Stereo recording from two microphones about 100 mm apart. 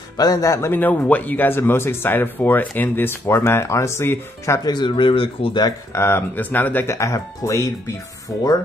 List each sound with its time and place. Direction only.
0.2 s speech: 35° left (ahead or behind)
4.6 s speech: 50° left (ahead or behind)
5.9 s speech: 25° left (ahead or behind)
7.0 s speech: 30° left (ahead or behind)